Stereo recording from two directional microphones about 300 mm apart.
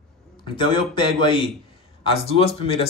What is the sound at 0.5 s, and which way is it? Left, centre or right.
Speech, centre.